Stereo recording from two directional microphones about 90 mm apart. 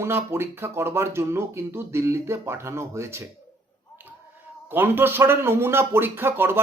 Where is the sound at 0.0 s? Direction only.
30° right (ahead or behind).